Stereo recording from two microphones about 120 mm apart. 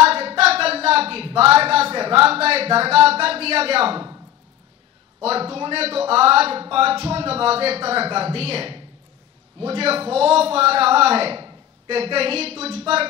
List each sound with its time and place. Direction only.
0.0 s speech: 55° right (ahead or behind)
5.2 s a man's voice: 55° right (ahead or behind)